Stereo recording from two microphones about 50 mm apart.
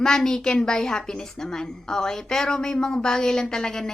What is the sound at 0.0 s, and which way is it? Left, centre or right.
A woman's voice, centre.